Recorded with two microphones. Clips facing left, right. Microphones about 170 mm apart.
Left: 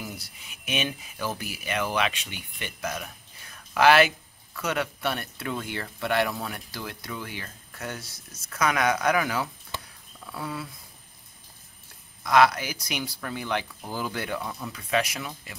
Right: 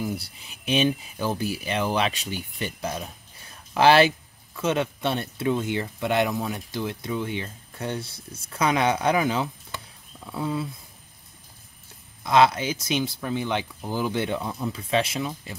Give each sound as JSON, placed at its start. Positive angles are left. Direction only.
{"t": 0.0, "sound": "speech", "side_deg": -30}
{"t": 12.2, "sound": "speech", "side_deg": -25}